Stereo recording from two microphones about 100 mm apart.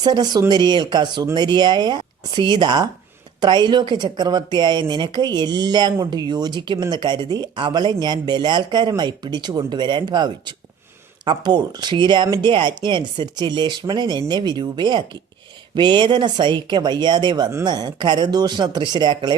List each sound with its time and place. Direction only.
0.0 s speech: 45° right (ahead or behind)